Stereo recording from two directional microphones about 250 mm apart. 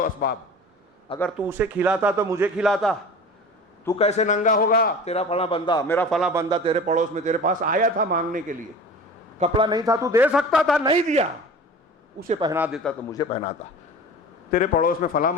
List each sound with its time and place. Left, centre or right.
0.0 s a man's voice: left
1.4 s a man's voice: centre
3.9 s a man's voice: left; by 6.3 s centre
6.3 s a man's voice: centre
6.7 s a man's voice: right
9.4 s a man's voice: centre
10.8 s a man's voice: right
12.3 s a man's voice: centre
12.5 s a man's voice: centre
13.1 s a man's voice: centre
14.5 s a man's voice: left